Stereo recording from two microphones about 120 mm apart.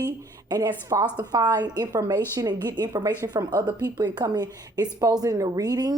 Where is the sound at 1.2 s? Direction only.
35° right (ahead or behind).